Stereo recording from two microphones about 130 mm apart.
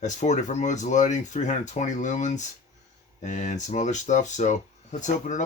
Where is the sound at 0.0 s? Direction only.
65° left (ahead or behind).